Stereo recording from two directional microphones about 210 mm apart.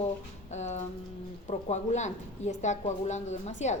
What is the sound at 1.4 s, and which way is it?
A woman's voice, 30° left (ahead or behind).